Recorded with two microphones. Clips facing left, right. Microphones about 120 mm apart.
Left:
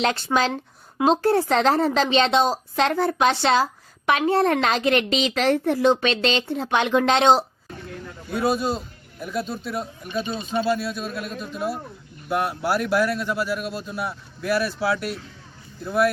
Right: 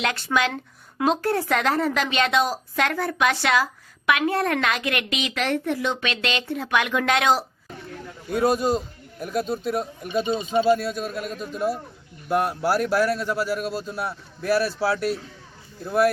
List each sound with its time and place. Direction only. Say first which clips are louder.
0.0 s speech: left 2 dB; 30° left (ahead or behind)
8.3 s a man's voice: right 2 dB; 45° right (ahead or behind)
11.3 s speech: right 3 dB; 5° left (ahead or behind)
12.4 s a man's voice: right 1 dB; 40° right (ahead or behind)